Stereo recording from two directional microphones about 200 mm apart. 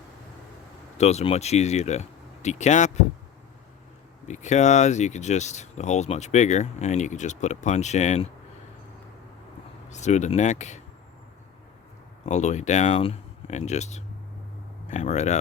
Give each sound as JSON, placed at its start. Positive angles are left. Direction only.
{"t": 0.9, "sound": "speech", "side_deg": 35}
{"t": 4.3, "sound": "speech", "side_deg": 35}
{"t": 9.9, "sound": "speech", "side_deg": 35}
{"t": 12.2, "sound": "speech", "side_deg": 35}